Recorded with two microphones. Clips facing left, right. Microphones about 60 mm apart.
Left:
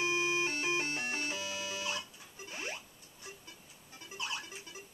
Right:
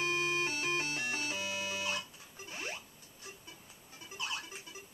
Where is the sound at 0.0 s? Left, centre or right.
Centre.